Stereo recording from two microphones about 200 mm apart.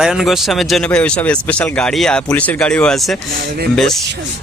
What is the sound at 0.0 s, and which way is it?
Speech, centre (ahead or behind).